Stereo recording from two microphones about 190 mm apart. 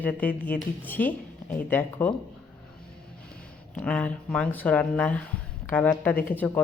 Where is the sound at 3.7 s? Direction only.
5° left (ahead or behind).